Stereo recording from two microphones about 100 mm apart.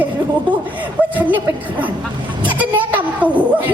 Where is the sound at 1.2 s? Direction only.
15° right (ahead or behind).